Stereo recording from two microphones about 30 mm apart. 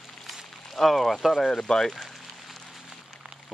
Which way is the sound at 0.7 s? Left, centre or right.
Centre.